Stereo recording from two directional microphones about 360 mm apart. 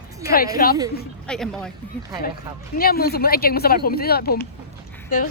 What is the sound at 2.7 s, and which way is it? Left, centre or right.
Speech, left.